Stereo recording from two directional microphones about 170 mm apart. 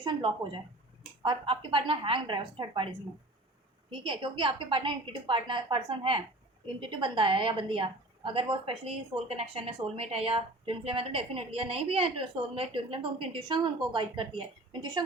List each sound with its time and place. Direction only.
0.0 s a woman's voice: 25° right (ahead or behind)
4.0 s a woman's voice: 30° right (ahead or behind)